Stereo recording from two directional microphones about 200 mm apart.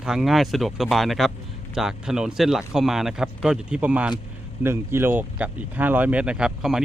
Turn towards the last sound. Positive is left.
turn(degrees=0)  # may be behind; listen again after turning